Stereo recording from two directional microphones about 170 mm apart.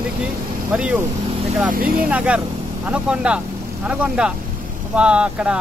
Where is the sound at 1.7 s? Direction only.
60° right (ahead or behind).